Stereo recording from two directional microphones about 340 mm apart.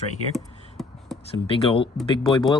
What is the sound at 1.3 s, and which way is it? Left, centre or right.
Speech, centre.